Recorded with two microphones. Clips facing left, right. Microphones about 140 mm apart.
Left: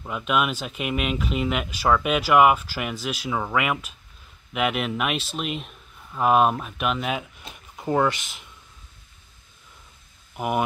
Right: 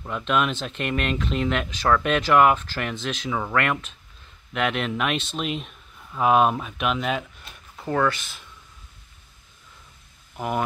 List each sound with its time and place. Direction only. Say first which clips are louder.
0.0 s speech: even; 5° left (ahead or behind)
7.7 s speech: left 1 dB; 20° left (ahead or behind)
10.3 s speech: left 2 dB; 10° left (ahead or behind)